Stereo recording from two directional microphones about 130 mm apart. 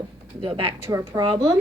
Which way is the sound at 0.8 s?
20° right (ahead or behind).